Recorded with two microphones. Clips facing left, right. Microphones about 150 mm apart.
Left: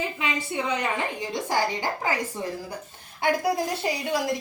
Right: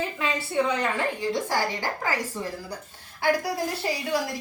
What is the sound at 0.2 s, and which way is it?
A woman's voice, 15° left (ahead or behind).